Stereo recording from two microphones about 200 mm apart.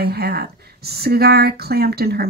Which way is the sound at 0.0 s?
50° right (ahead or behind).